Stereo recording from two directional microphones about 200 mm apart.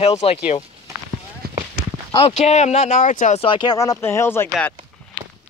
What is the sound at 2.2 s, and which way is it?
Speech, 35° left (ahead or behind).